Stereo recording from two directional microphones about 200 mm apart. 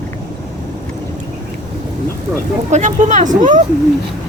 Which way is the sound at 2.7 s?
35° right (ahead or behind).